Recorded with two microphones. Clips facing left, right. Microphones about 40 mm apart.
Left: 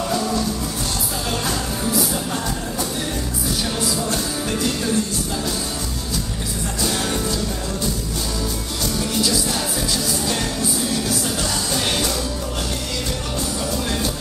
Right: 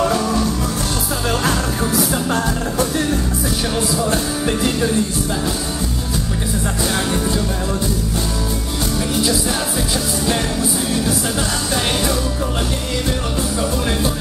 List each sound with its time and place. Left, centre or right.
4.0 s music: right
6.8 s music: centre